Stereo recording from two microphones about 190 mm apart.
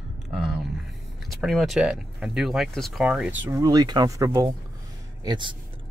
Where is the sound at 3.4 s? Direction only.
15° right (ahead or behind).